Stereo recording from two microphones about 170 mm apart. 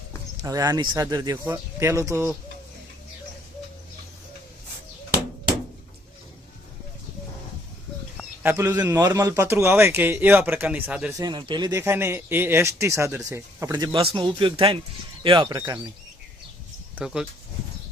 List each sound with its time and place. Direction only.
0.4 s speech: 20° right (ahead or behind)
8.4 s a man's voice: 15° right (ahead or behind)
11.2 s a man's voice: 25° right (ahead or behind)
16.9 s speech: 5° right (ahead or behind)